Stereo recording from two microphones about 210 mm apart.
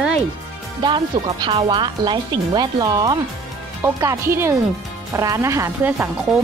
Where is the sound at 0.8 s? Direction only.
20° right (ahead or behind).